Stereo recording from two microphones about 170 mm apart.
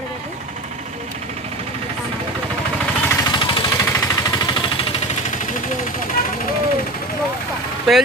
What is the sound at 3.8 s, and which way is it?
Jackhammer, 15° left (ahead or behind).